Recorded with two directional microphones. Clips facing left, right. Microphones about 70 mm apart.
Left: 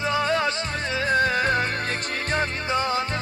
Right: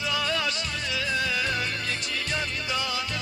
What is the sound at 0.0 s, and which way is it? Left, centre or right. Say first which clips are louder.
Music: left 5 dB; left.